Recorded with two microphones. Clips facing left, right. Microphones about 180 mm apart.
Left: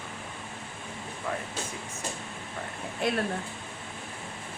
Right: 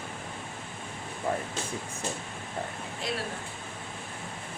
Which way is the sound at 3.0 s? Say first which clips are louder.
Left 5 dB; 55° left (ahead or behind).